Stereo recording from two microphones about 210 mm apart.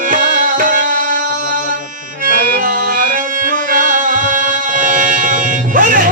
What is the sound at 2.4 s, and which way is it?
Music, 45° right (ahead or behind).